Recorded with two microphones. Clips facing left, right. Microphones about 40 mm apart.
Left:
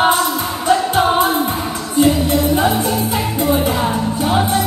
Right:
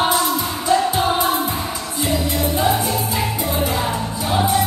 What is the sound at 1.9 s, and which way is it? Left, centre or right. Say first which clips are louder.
Music: left 8 dB; left.